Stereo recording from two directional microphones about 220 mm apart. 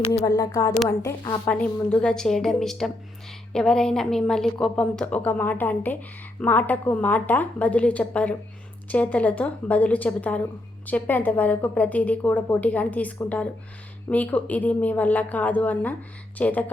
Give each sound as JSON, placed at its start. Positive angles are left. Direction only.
{"t": 0.2, "sound": "a woman's voice", "side_deg": 20}